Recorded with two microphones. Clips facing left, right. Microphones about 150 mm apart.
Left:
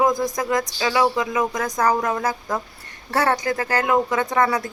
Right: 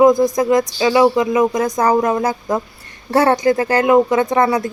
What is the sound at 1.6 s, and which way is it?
Speech, 30° right (ahead or behind).